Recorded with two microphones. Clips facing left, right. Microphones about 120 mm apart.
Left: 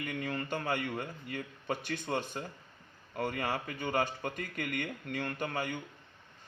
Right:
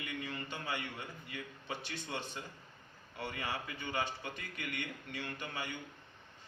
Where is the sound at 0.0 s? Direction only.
50° left (ahead or behind).